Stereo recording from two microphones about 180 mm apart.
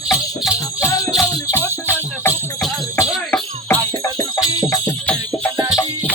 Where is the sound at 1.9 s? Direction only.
15° left (ahead or behind).